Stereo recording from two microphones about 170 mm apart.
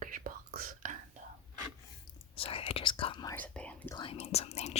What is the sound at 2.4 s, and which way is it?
Whispering, 35° left (ahead or behind).